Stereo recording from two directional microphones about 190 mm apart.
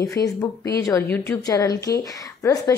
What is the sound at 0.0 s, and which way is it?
A woman's voice, 15° left (ahead or behind).